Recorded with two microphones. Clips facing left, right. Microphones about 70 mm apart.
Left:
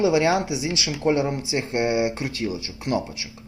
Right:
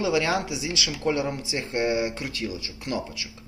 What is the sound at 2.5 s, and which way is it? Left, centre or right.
Speech, left.